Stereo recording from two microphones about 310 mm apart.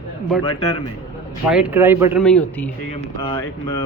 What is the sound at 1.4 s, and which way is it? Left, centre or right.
Speech, centre.